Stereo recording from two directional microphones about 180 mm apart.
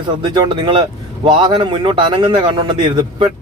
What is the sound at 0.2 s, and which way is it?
A man's voice, 25° right (ahead or behind).